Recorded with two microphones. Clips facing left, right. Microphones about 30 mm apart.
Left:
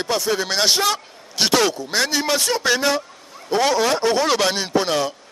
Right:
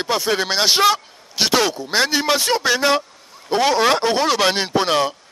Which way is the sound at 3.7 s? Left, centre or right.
Right.